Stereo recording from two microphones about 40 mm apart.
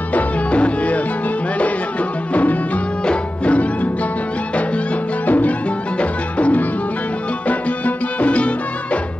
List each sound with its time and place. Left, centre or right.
0.1 s music: left
3.1 s music: left
5.2 s music: left